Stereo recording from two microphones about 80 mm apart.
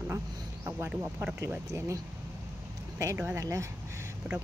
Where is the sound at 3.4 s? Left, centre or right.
Right.